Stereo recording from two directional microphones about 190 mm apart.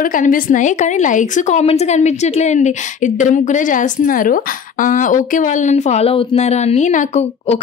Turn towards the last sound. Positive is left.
turn(degrees=40)  # may be behind; listen again after turning